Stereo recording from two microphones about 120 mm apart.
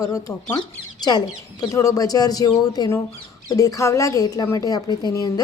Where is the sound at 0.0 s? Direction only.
30° left (ahead or behind).